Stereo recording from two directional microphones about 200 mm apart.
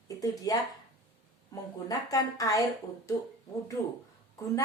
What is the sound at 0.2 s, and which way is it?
Speech, 15° left (ahead or behind).